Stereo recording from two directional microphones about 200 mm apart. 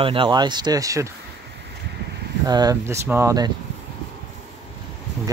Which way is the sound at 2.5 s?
20° right (ahead or behind).